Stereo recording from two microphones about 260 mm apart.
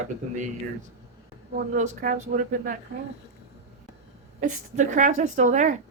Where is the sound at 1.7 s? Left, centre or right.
Right.